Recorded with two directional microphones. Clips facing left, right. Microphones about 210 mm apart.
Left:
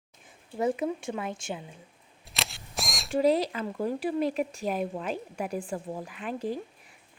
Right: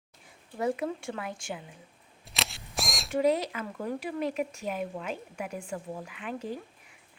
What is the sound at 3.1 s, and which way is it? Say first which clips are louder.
A woman's voice: left 2 dB; 30° left (ahead or behind).